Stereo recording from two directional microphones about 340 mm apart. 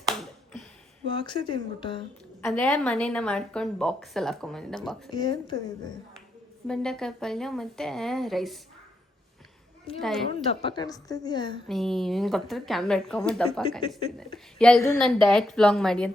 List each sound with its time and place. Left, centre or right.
0.1 s finger snapping: centre
1.1 s a woman's voice: centre
2.5 s a woman's voice: centre
5.1 s a woman's voice: centre
6.7 s a woman's voice: centre
9.9 s a woman's voice: centre
11.7 s a woman's voice: centre